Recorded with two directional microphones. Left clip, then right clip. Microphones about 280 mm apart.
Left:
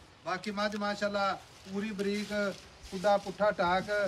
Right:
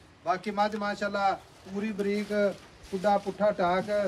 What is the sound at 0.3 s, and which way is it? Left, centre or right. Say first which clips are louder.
Speech: right 6 dB; centre.